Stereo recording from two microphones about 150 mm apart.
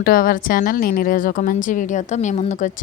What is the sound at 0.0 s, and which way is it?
A woman's voice, 70° left (ahead or behind).